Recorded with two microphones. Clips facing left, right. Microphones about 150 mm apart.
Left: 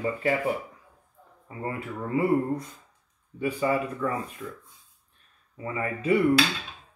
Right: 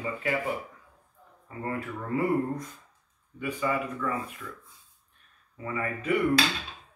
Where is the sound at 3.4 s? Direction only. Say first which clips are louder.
Left 4 dB; 30° left (ahead or behind).